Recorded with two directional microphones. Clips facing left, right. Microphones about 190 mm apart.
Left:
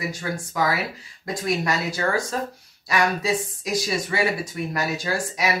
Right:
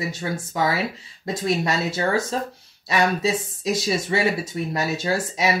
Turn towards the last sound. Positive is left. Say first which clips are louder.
# right 3 dB
turn(degrees=-25)  # may be behind; listen again after turning